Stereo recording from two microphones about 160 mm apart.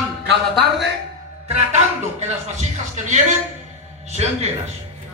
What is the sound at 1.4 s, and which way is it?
Speech, 45° right (ahead or behind).